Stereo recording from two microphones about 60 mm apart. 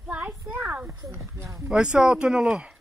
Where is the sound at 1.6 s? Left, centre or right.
Centre.